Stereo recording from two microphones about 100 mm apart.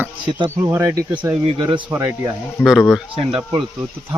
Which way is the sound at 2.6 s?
10° right (ahead or behind).